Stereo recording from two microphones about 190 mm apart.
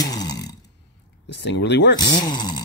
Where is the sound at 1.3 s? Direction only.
65° left (ahead or behind).